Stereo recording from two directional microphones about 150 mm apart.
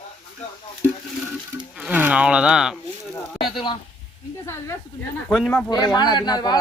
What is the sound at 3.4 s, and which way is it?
Speech, 35° left (ahead or behind).